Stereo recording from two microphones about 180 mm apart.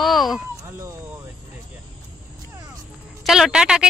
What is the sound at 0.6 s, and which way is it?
Speech, 15° right (ahead or behind).